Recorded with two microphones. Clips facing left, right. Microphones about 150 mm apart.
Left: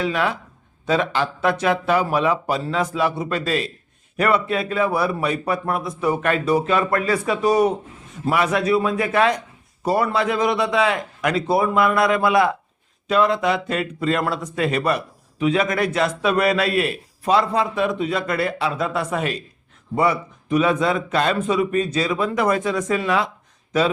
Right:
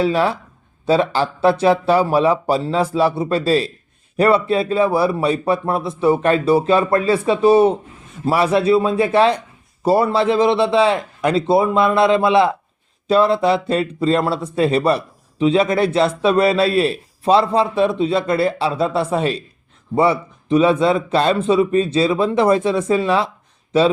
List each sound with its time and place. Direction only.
0.0 s speech: 30° right (ahead or behind)